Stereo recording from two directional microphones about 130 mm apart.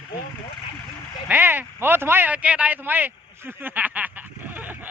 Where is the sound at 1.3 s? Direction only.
15° right (ahead or behind).